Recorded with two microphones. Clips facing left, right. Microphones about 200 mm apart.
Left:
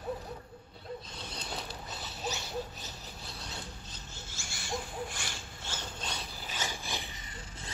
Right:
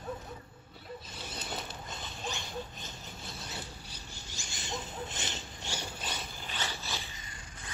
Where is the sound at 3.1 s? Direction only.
Centre (ahead or behind).